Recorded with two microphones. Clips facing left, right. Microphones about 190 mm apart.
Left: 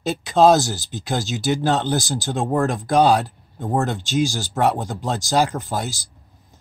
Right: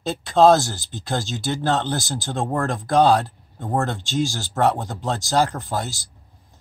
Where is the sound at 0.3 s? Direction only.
15° left (ahead or behind).